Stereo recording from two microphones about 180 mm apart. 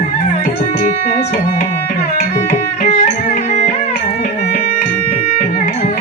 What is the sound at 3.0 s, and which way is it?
Music, 40° left (ahead or behind).